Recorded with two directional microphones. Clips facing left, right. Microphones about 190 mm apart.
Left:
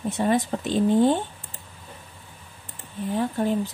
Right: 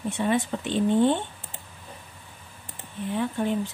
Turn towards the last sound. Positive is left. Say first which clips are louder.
# left 2 dB
turn(degrees=40)  # may be behind; listen again after turning